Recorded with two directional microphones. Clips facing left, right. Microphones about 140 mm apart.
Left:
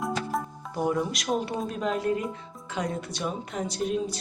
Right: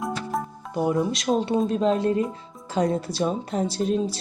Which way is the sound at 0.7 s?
20° right (ahead or behind).